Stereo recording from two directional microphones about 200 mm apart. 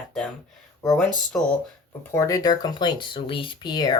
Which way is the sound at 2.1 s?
15° left (ahead or behind).